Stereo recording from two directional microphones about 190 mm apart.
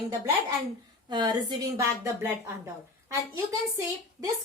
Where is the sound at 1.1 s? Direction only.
25° right (ahead or behind).